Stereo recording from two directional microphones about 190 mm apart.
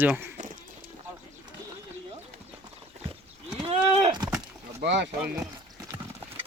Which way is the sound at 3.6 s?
25° right (ahead or behind).